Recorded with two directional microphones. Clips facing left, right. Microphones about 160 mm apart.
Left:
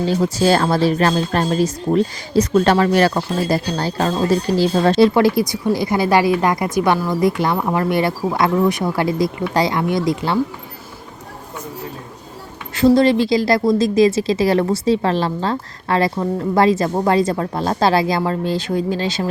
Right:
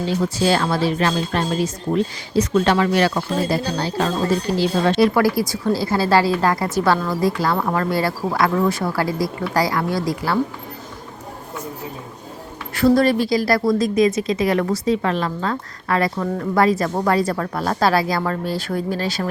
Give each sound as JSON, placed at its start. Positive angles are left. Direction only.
{"t": 0.1, "sound": "speech", "side_deg": 40}
{"t": 5.0, "sound": "a woman's voice", "side_deg": 25}
{"t": 12.7, "sound": "a woman's voice", "side_deg": 20}